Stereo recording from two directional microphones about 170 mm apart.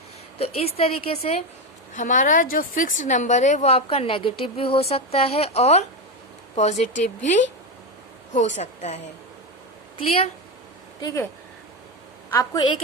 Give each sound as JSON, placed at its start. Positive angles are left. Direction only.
{"t": 0.3, "sound": "a woman's voice", "side_deg": 35}
{"t": 1.9, "sound": "a woman's voice", "side_deg": 50}
{"t": 11.0, "sound": "speech", "side_deg": 15}
{"t": 12.3, "sound": "a woman's voice", "side_deg": 25}